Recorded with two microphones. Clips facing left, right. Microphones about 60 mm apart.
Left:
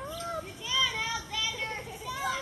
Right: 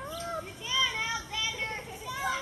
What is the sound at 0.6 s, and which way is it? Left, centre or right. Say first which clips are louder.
Children playing: even; centre.